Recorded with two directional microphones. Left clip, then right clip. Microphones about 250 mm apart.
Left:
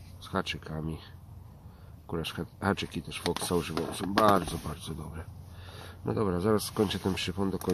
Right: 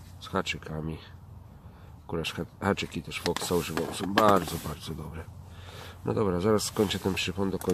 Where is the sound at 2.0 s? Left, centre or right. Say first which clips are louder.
Right 3 dB; centre.